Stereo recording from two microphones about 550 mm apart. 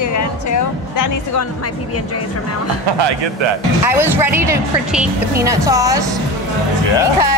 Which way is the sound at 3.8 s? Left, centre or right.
Centre.